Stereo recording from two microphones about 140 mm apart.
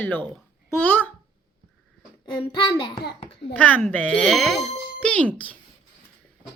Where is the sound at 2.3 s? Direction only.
35° left (ahead or behind).